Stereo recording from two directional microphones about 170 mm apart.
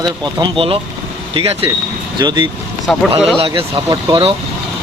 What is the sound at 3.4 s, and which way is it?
Speech, 30° right (ahead or behind).